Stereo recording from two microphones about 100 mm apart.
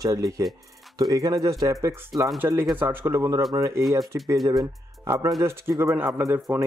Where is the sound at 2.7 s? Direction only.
20° right (ahead or behind).